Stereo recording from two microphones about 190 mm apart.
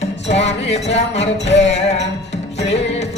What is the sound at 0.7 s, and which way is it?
Speech, 35° left (ahead or behind).